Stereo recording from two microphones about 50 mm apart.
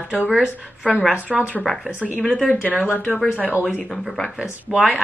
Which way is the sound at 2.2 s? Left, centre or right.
Centre.